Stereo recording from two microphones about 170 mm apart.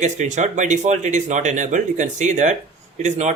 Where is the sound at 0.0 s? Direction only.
45° right (ahead or behind).